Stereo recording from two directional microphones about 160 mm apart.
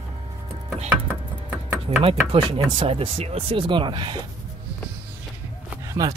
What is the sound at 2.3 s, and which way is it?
Speech, 35° right (ahead or behind).